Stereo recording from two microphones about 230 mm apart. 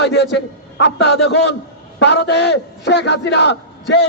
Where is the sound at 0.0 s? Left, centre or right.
Left.